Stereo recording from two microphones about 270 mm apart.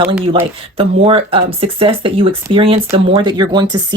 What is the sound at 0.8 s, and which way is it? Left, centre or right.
Speech, right.